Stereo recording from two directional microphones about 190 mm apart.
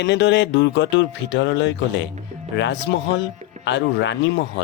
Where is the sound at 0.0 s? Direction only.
65° left (ahead or behind).